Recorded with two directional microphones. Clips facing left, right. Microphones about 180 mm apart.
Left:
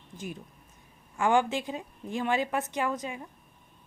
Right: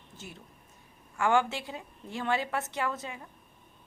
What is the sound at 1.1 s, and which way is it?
Speech, 15° left (ahead or behind).